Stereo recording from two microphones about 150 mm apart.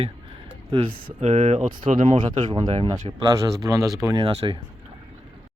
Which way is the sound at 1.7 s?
65° right (ahead or behind).